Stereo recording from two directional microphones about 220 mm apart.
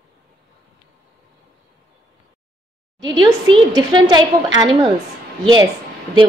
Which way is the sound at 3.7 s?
20° right (ahead or behind).